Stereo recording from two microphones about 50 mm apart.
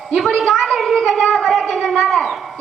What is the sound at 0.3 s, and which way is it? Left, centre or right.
Speech, centre.